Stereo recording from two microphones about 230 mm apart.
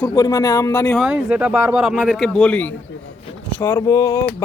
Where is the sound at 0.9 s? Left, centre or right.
Centre.